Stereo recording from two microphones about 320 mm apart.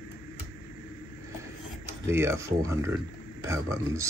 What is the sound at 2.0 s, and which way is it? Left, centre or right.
Speech, centre.